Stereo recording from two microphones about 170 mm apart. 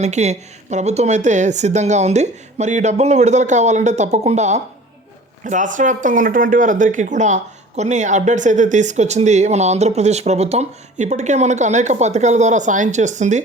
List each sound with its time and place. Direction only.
0.0 s speech: 40° right (ahead or behind)